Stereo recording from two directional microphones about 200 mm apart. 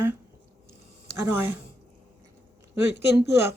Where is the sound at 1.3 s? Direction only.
10° right (ahead or behind).